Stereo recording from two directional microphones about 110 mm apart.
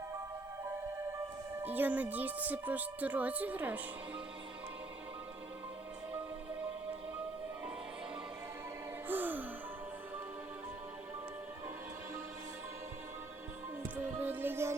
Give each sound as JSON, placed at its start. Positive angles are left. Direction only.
{"t": 1.6, "sound": "speech", "side_deg": -15}
{"t": 9.0, "sound": "music", "side_deg": -15}
{"t": 13.8, "sound": "music", "side_deg": -15}